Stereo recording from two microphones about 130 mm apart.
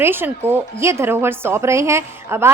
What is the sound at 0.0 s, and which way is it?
A woman's voice, 15° right (ahead or behind).